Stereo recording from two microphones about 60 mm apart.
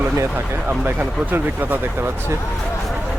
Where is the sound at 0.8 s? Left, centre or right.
Right.